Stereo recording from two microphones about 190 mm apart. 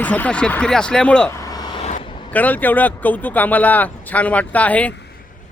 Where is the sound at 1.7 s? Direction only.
35° left (ahead or behind).